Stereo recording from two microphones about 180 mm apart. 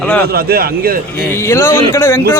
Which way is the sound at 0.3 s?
60° right (ahead or behind).